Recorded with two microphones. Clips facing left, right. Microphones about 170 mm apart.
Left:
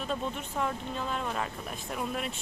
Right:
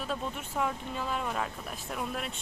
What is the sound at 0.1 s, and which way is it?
Speech, 5° right (ahead or behind).